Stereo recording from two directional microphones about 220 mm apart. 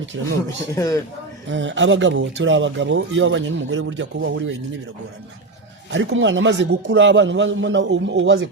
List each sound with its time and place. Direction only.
0.2 s speech: 60° right (ahead or behind)
0.8 s a man's voice: 15° left (ahead or behind)
1.5 s speech: 55° right (ahead or behind)
5.9 s speech: 55° right (ahead or behind)